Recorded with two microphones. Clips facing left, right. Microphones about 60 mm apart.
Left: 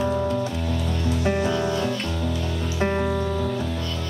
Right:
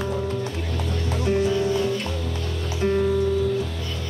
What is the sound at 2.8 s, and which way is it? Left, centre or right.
Music, left.